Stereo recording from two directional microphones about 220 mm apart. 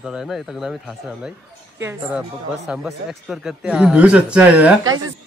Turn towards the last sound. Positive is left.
turn(degrees=-5)  # may be behind; listen again after turning